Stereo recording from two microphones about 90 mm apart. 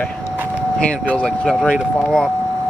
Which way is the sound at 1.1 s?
10° left (ahead or behind).